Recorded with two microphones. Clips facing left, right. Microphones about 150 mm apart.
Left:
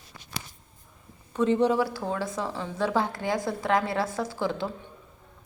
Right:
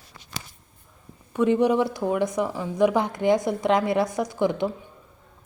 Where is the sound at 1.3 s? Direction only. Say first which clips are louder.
Right 3 dB; 15° right (ahead or behind).